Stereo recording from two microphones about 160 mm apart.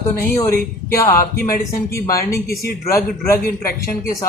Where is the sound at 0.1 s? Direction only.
15° left (ahead or behind).